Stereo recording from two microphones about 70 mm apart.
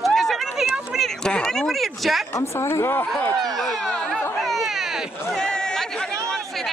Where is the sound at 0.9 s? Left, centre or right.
Centre.